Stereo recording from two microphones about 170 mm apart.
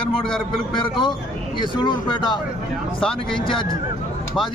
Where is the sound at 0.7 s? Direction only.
30° left (ahead or behind).